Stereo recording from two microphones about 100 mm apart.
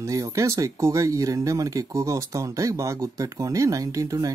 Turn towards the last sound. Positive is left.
turn(degrees=-35)  # may be behind; listen again after turning